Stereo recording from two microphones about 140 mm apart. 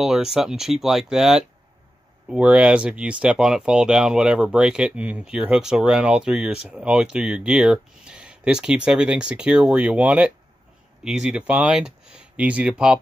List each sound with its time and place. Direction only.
0.0 s speech: 5° right (ahead or behind)